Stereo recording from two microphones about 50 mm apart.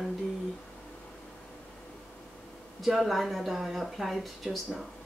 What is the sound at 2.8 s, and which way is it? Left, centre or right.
Speech, centre.